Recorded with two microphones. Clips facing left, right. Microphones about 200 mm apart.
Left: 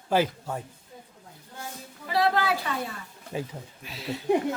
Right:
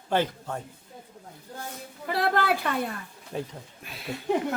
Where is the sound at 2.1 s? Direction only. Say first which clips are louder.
Left 1 dB; 55° right (ahead or behind).